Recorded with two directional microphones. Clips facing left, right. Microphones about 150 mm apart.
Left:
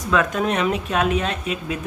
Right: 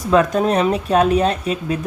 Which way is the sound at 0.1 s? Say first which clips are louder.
Right 5 dB; 35° right (ahead or behind).